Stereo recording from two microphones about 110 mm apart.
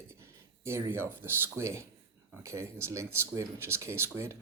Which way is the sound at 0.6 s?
25° right (ahead or behind).